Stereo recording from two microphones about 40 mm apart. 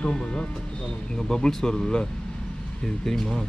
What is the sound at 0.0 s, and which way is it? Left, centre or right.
Speech, left.